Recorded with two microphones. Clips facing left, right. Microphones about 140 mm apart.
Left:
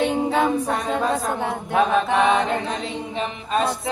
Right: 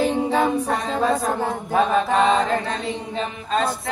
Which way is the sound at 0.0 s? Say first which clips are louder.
Even; centre (ahead or behind).